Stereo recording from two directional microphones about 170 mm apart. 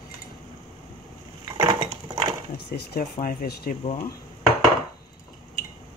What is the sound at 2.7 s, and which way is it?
Speech, 70° left (ahead or behind).